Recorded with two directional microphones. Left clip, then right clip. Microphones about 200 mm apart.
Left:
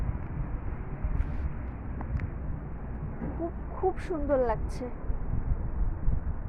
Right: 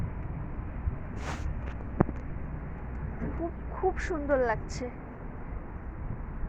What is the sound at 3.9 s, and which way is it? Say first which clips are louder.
Speech: even; centre (ahead or behind).